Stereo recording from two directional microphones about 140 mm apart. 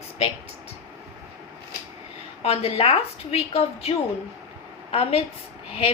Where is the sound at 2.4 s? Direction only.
45° left (ahead or behind).